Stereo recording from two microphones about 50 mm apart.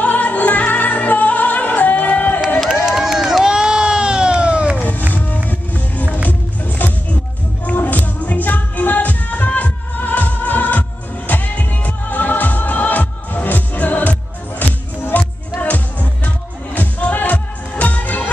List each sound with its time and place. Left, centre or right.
0.0 s music: left
2.8 s run: centre; by 4.8 s right
6.2 s music: left